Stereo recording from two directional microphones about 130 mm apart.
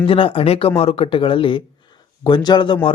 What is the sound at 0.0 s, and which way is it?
Speech, 40° left (ahead or behind).